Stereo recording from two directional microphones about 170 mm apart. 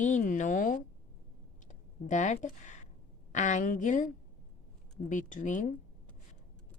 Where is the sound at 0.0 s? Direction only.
50° left (ahead or behind).